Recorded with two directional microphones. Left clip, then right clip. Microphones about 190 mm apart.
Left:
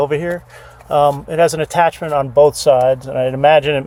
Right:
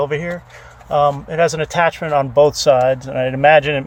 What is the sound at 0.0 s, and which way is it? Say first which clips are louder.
Speech: left 3 dB; 15° left (ahead or behind).